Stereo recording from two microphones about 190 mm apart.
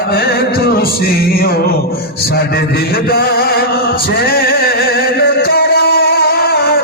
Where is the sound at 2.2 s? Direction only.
55° left (ahead or behind).